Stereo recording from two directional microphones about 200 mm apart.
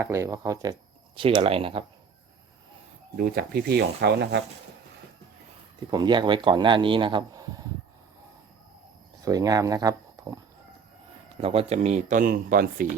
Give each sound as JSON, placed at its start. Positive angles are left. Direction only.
{"t": 0.0, "sound": "speech", "side_deg": -15}
{"t": 3.2, "sound": "speech", "side_deg": -50}
{"t": 5.9, "sound": "speech", "side_deg": -20}
{"t": 9.2, "sound": "speech", "side_deg": -15}
{"t": 11.3, "sound": "speech", "side_deg": -30}